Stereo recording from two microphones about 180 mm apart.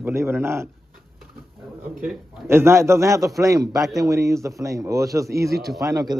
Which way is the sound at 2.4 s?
15° right (ahead or behind).